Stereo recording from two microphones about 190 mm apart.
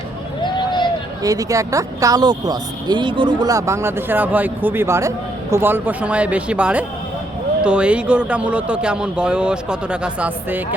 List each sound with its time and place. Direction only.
0.4 s vehicle: 25° left (ahead or behind)
1.2 s speech: 20° right (ahead or behind)